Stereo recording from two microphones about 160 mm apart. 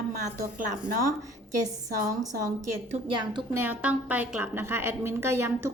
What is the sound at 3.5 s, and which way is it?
A woman's voice, 10° right (ahead or behind).